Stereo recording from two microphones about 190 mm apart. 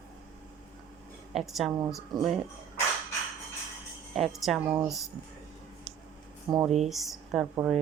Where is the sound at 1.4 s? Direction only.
Centre (ahead or behind).